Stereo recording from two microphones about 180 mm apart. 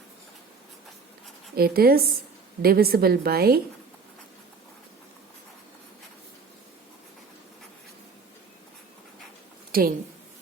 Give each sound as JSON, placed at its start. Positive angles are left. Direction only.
{"t": 1.5, "sound": "a woman's voice", "side_deg": -60}
{"t": 9.7, "sound": "a woman's voice", "side_deg": -55}